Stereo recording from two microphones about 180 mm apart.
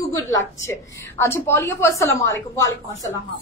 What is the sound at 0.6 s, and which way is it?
A woman's voice, 15° left (ahead or behind).